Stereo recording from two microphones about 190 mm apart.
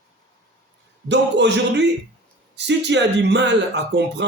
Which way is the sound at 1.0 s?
65° right (ahead or behind).